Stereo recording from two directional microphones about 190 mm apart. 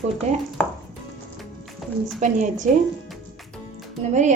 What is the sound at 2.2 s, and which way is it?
Speech, 40° right (ahead or behind).